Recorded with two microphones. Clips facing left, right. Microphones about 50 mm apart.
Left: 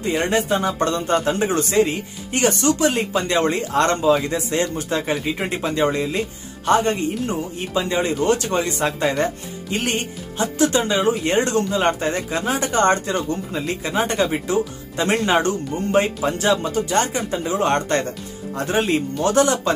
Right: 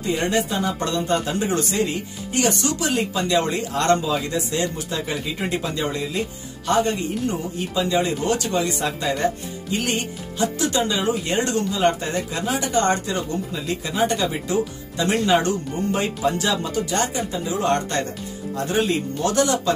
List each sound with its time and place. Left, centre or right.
0.0 s speech: left